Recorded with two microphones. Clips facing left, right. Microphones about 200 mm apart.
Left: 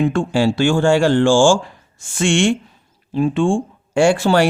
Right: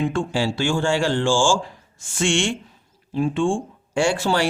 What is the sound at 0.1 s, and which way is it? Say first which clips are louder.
Speech: left 6 dB; 60° left (ahead or behind).